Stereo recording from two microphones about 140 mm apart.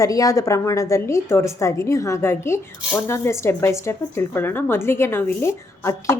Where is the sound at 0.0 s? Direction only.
25° left (ahead or behind).